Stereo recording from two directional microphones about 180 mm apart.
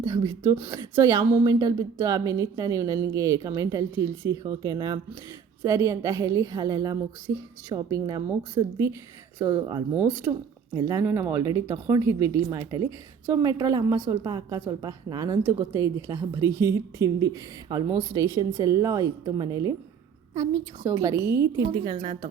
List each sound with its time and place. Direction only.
0.0 s a woman's voice: 20° right (ahead or behind)
9.4 s a woman's voice: 15° right (ahead or behind)
21.7 s a woman's voice: 30° right (ahead or behind)